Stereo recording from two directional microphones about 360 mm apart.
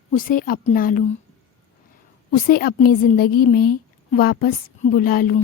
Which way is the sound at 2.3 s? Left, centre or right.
Left.